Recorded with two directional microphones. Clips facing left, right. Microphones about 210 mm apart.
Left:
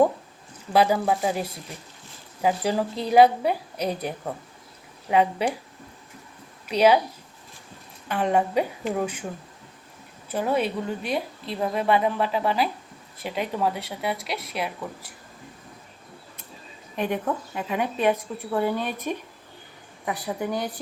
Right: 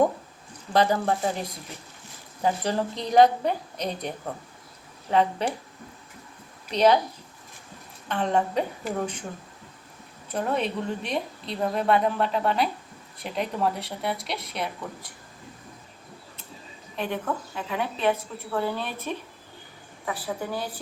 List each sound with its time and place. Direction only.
0.7 s a woman's voice: 10° left (ahead or behind)
5.1 s a woman's voice: 10° left (ahead or behind)
6.7 s a woman's voice: 10° left (ahead or behind)
8.0 s a woman's voice: 10° left (ahead or behind)
10.3 s a woman's voice: 5° left (ahead or behind)
17.0 s a woman's voice: 15° left (ahead or behind)